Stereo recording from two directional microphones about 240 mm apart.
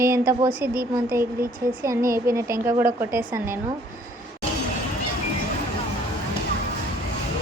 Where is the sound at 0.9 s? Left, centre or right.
Centre.